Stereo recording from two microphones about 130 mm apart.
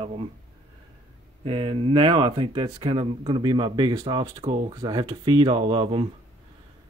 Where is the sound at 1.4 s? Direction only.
45° right (ahead or behind).